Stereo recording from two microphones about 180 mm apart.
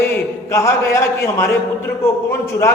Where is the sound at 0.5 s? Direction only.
15° left (ahead or behind).